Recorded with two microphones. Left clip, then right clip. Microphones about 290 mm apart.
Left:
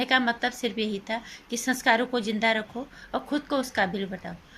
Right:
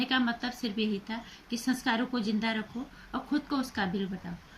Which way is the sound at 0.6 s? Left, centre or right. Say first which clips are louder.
Left 5 dB; left.